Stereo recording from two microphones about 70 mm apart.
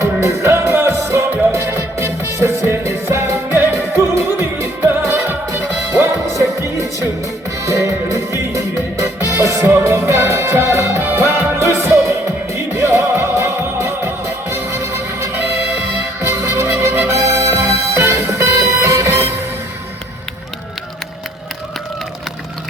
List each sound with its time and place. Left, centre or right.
0.0 s music: right